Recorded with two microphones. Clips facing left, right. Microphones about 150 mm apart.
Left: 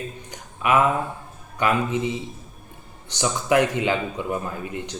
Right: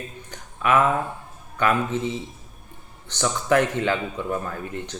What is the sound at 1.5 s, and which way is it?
Speech, 15° left (ahead or behind).